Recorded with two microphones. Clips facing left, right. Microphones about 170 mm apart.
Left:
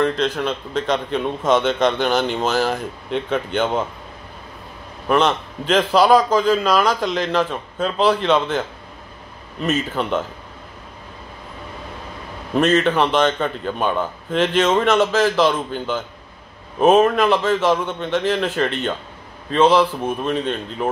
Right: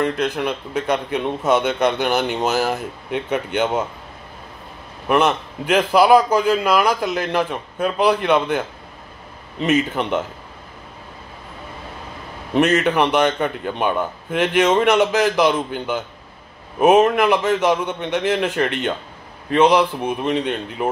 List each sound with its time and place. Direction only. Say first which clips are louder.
0.0 s a man's voice: left 1 dB; 15° right (ahead or behind)
5.0 s a man's voice: even; 10° right (ahead or behind)
12.5 s a man's voice: even; 10° right (ahead or behind)